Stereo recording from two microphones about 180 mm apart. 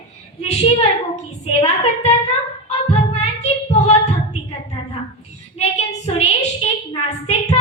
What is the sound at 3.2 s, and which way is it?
Child singing, 40° left (ahead or behind).